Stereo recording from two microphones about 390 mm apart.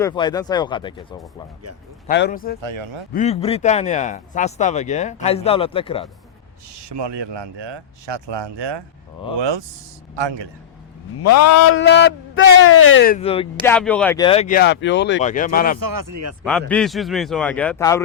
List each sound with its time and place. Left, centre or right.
0.0 s speech: centre
2.0 s a man's voice: left
6.7 s speech: right
11.2 s a man's voice: left; by 13.5 s centre
13.7 s a man's voice: centre; by 15.8 s left
15.8 s speech: right
16.4 s speech: centre